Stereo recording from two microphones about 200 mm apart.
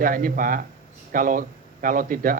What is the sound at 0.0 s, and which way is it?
A man's voice, 45° right (ahead or behind).